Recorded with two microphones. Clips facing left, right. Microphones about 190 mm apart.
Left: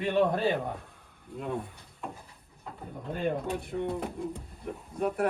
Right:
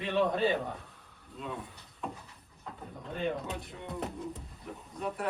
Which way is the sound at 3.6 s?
55° left (ahead or behind).